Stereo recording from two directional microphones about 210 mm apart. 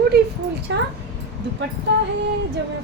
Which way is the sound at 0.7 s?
60° right (ahead or behind).